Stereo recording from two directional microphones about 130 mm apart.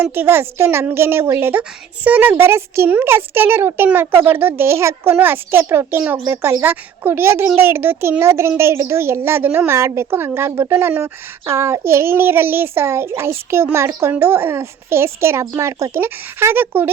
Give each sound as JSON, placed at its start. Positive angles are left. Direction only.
{"t": 0.0, "sound": "a child's voice", "side_deg": -15}